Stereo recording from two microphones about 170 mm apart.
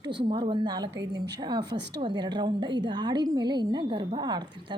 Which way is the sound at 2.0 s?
25° right (ahead or behind).